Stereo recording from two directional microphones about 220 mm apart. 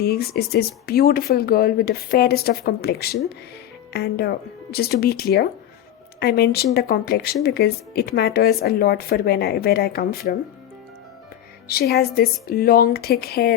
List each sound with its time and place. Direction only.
0.0 s speech: 45° left (ahead or behind)
11.7 s speech: 45° left (ahead or behind)